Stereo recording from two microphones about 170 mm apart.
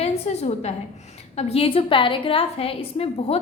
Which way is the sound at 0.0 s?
35° left (ahead or behind).